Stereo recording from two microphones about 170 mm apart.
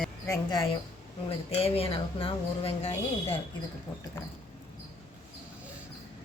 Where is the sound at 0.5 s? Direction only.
30° left (ahead or behind).